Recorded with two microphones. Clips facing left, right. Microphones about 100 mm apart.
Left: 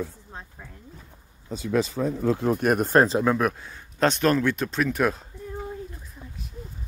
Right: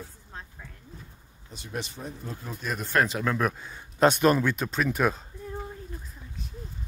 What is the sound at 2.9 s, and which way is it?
Speech, 30° left (ahead or behind).